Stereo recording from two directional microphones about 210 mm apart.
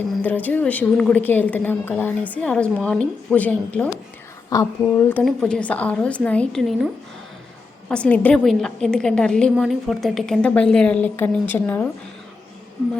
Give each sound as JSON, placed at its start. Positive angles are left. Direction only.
{"t": 0.2, "sound": "a woman's voice", "side_deg": 10}
{"t": 4.4, "sound": "a woman's voice", "side_deg": 15}